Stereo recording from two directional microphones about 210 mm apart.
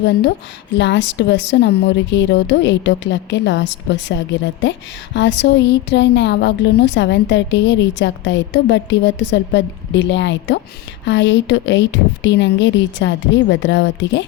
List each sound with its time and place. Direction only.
0.8 s a woman's voice: 55° left (ahead or behind)